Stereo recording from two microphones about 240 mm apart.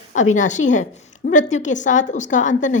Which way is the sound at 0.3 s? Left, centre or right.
Left.